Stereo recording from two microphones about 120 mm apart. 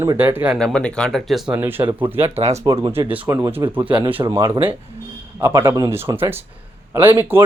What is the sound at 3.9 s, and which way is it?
Speech, 45° right (ahead or behind).